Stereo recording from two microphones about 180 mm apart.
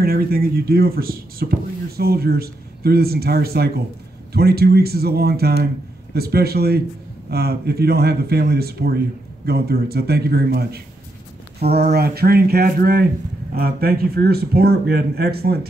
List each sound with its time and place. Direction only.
0.0 s speech: 55° right (ahead or behind)